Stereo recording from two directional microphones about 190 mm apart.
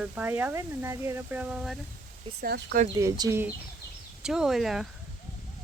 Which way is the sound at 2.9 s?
20° right (ahead or behind).